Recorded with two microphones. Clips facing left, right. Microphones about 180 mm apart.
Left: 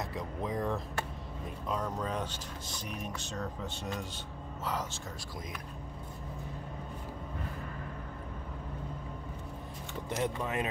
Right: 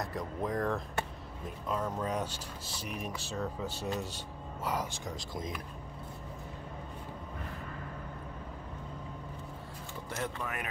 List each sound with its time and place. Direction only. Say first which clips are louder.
0.0 s speech: right 1 dB; centre (ahead or behind); by 5.4 s 15° right (ahead or behind)
10.0 s speech: left 4 dB; 20° left (ahead or behind)